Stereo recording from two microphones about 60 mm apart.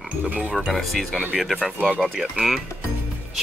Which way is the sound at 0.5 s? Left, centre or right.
Centre.